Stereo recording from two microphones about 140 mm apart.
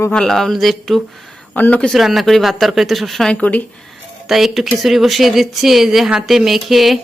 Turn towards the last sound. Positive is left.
turn(degrees=0)  # may be behind; listen again after turning